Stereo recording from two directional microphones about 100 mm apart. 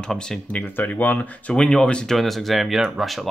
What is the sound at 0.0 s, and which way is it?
Speech, 5° left (ahead or behind).